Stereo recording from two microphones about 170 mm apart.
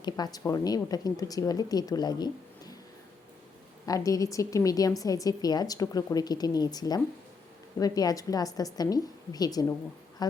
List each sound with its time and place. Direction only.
0.0 s a woman's voice: 25° left (ahead or behind)
3.8 s a woman's voice: 20° left (ahead or behind)